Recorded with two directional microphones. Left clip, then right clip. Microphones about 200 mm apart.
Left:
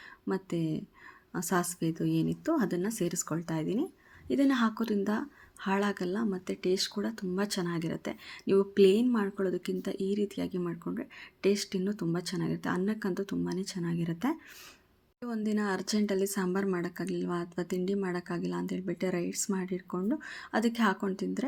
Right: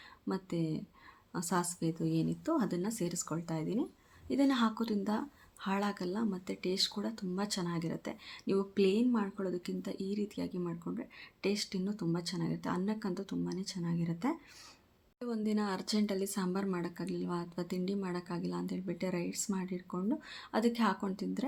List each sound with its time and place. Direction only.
0.3 s a woman's voice: 15° left (ahead or behind)